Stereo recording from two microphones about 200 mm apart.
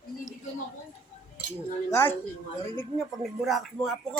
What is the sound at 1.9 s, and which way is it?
A woman's voice, 10° left (ahead or behind).